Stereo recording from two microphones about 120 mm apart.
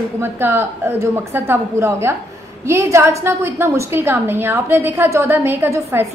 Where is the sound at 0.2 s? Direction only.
20° right (ahead or behind).